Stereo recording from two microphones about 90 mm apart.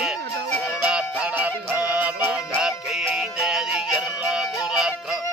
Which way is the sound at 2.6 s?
5° right (ahead or behind).